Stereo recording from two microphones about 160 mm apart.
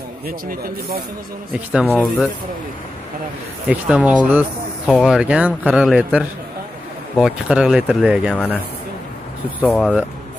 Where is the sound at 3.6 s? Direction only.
10° right (ahead or behind).